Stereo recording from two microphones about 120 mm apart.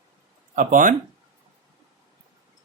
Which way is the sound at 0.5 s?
90° right.